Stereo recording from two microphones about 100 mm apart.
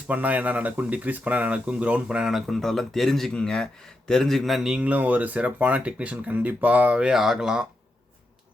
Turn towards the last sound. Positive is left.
turn(degrees=-5)  # may be behind; listen again after turning